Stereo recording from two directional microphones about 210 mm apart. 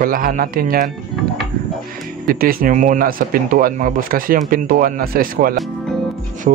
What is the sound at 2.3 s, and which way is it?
Speech, 45° right (ahead or behind).